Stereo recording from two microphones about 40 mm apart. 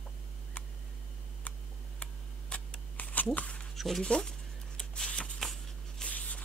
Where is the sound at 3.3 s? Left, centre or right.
Left.